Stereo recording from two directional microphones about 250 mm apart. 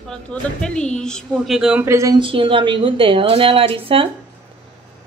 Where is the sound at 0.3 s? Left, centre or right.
Centre; by 4.1 s right.